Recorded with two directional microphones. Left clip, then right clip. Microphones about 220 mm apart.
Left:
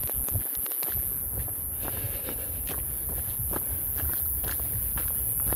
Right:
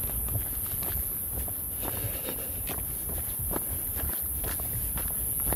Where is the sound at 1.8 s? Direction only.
25° right (ahead or behind).